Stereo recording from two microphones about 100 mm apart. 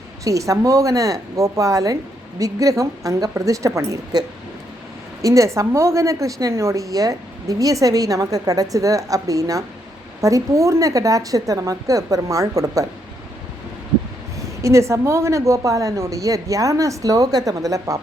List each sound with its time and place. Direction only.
0.3 s a woman's voice: 35° right (ahead or behind)
5.2 s a woman's voice: 30° right (ahead or behind)
14.3 s a woman's voice: 30° right (ahead or behind)